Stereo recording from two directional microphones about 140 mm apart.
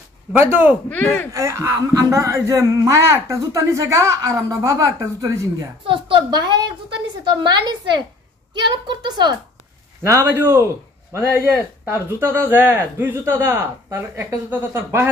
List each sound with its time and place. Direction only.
0.4 s speech: 15° right (ahead or behind)
0.8 s speech: 10° left (ahead or behind)
1.3 s speech: 20° right (ahead or behind)
5.9 s a woman's voice: 40° right (ahead or behind)
10.0 s speech: 20° right (ahead or behind)
11.8 s speech: 15° right (ahead or behind)